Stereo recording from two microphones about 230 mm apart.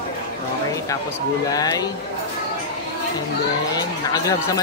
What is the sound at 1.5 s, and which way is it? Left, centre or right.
Speech, centre.